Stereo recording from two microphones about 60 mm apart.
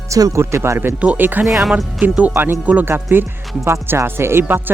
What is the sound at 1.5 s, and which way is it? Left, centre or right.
Speech, centre.